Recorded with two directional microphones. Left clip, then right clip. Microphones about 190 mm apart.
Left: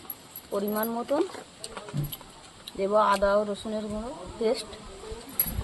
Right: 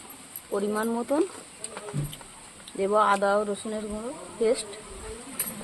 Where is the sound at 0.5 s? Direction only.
25° right (ahead or behind).